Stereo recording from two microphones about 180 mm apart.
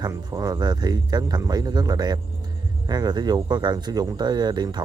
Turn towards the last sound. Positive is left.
turn(degrees=-25)  # may be behind; listen again after turning